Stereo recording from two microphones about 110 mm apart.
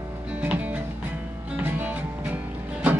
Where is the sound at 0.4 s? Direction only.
15° right (ahead or behind).